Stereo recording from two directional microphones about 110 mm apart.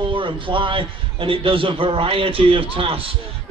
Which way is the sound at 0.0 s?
50° right (ahead or behind).